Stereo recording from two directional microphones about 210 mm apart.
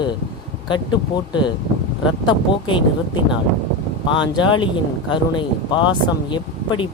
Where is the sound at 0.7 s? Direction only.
20° left (ahead or behind).